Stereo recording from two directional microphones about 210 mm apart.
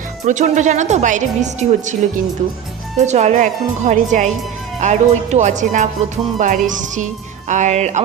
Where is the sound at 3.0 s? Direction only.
35° right (ahead or behind).